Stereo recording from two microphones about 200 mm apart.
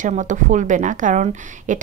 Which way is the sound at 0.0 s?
40° right (ahead or behind).